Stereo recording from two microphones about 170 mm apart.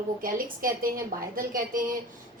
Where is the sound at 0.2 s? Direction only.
55° right (ahead or behind).